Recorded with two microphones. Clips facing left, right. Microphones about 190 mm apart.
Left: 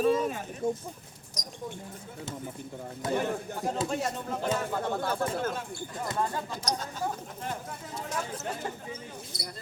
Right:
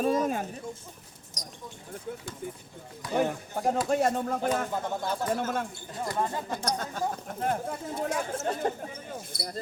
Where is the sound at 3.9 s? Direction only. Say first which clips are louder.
Right 6 dB; 55° right (ahead or behind).